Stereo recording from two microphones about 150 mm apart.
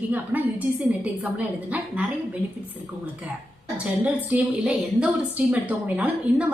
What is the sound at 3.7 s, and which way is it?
A woman's voice, 10° right (ahead or behind).